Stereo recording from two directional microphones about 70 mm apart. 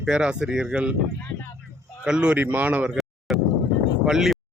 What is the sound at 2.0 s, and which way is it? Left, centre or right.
Speech, centre.